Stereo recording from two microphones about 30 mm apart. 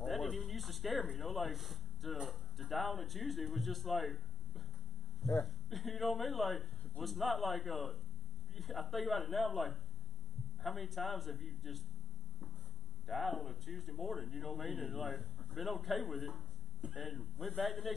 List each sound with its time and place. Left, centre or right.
0.0 s a sound: centre
2.2 s speech: centre
13.1 s speech: centre